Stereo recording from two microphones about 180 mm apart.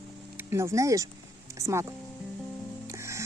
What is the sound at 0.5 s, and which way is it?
Speech, 15° right (ahead or behind).